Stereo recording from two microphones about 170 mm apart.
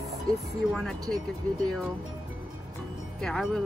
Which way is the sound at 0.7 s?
Centre (ahead or behind).